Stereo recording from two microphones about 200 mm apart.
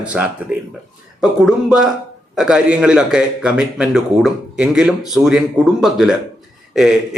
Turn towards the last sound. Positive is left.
turn(degrees=0)  # may be behind; listen again after turning